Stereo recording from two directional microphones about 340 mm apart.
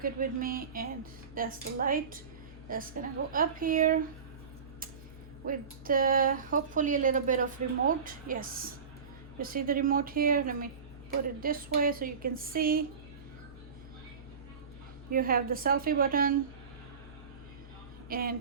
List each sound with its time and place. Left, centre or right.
0.0 s speech: right
5.5 s speech: right
15.1 s speech: right
18.1 s speech: right